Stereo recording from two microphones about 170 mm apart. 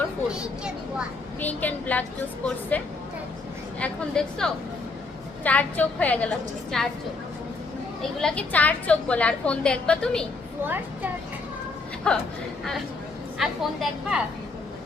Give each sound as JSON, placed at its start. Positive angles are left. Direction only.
{"t": 0.3, "sound": "a woman's voice", "side_deg": -5}
{"t": 1.4, "sound": "a woman's voice", "side_deg": 10}
{"t": 8.2, "sound": "a woman's voice", "side_deg": 10}
{"t": 12.1, "sound": "a woman's voice", "side_deg": 5}
{"t": 13.4, "sound": "a woman's voice", "side_deg": 0}